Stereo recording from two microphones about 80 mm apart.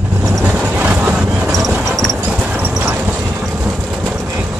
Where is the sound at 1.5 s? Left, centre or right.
Centre.